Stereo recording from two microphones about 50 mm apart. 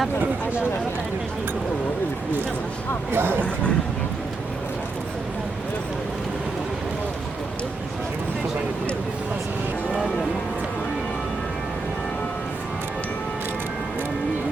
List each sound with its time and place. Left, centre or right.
3.1 s speech: right